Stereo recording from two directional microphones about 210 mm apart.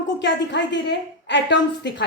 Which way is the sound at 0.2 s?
55° left (ahead or behind).